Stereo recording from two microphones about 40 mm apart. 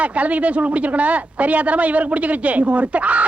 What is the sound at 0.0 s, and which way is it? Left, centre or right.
Speech, right.